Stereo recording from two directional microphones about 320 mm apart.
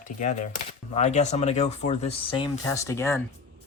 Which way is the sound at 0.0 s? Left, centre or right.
Left.